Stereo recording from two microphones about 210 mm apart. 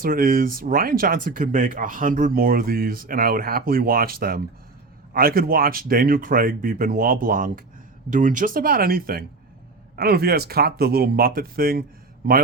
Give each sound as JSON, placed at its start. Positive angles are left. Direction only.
{"t": 0.0, "sound": "speech", "side_deg": -40}